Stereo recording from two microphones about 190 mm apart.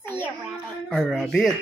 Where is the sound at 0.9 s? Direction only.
5° left (ahead or behind).